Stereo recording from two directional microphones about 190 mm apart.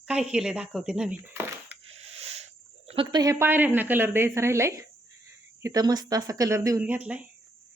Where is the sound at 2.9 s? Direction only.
25° right (ahead or behind).